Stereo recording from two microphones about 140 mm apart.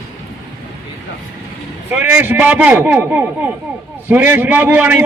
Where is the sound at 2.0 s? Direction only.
15° right (ahead or behind).